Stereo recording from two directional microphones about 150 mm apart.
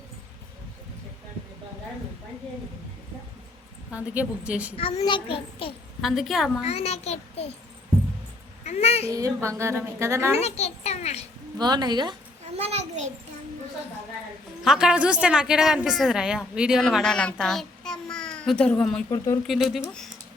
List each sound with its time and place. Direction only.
3.9 s a woman's voice: 10° right (ahead or behind)
4.8 s a child's voice: 40° left (ahead or behind)
6.0 s a woman's voice: centre (ahead or behind)
6.7 s a child's voice: 45° left (ahead or behind)
8.6 s a woman's voice: 45° left (ahead or behind)
9.0 s a woman's voice: 20° right (ahead or behind)
10.4 s a child's voice: 45° left (ahead or behind)
11.5 s a woman's voice: 30° right (ahead or behind)
12.5 s a sound: 45° right (ahead or behind)
14.6 s a woman's voice: 5° right (ahead or behind)
17.3 s a sound: centre (ahead or behind)
19.1 s speech: 20° left (ahead or behind)
19.5 s a woman's voice: centre (ahead or behind)